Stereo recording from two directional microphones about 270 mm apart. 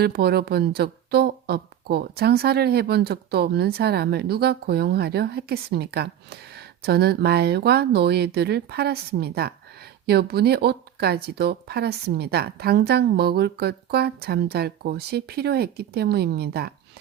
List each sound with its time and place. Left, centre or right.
0.0 s speech: right